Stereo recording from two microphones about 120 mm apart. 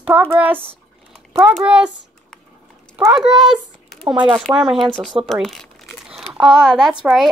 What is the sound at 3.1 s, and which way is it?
A child's voice, 5° right (ahead or behind).